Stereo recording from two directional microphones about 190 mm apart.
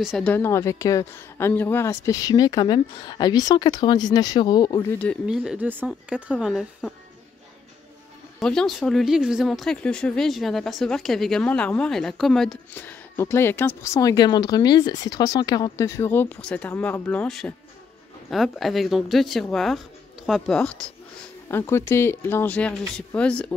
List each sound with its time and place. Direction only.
0.0 s speech: centre (ahead or behind)
0.3 s speech: 15° left (ahead or behind)
4.9 s speech: 10° left (ahead or behind)
5.2 s speech: 5° right (ahead or behind)
8.4 s speech: 5° left (ahead or behind)